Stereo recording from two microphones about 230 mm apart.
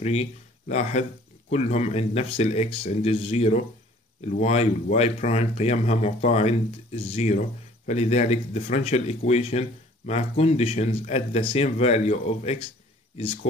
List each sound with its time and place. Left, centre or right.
0.0 s speech: left